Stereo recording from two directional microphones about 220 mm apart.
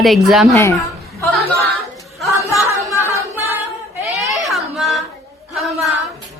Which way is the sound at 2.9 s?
10° left (ahead or behind).